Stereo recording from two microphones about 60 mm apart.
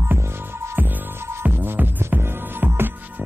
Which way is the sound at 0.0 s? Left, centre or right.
Right.